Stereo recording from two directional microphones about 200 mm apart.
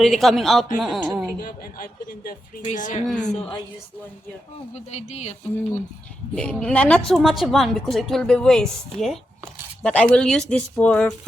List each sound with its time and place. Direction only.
0.0 s a woman's voice: centre (ahead or behind)
1.4 s a man's voice: 45° left (ahead or behind)
3.1 s a woman's voice: 5° left (ahead or behind)
4.7 s a man's voice: 35° left (ahead or behind)
6.3 s a woman's voice: 5° left (ahead or behind)